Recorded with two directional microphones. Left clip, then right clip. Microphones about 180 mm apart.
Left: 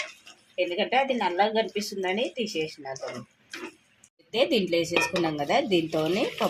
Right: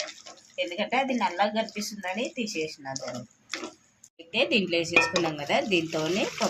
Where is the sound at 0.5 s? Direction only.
45° left (ahead or behind).